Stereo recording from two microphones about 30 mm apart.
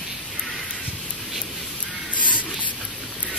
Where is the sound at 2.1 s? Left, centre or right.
Left.